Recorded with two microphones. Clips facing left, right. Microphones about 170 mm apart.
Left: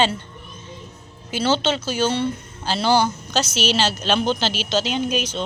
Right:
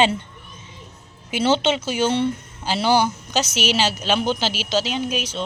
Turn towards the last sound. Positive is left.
turn(degrees=-5)  # may be behind; listen again after turning